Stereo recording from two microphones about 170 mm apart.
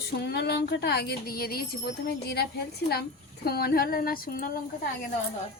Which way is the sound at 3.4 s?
65° left (ahead or behind).